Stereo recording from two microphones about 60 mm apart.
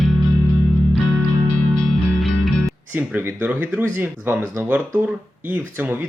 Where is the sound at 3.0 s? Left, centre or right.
Right.